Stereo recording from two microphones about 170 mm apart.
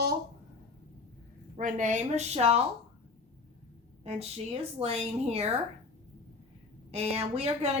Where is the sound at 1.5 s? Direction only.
50° right (ahead or behind).